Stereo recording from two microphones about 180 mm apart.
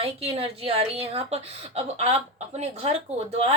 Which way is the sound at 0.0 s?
30° right (ahead or behind).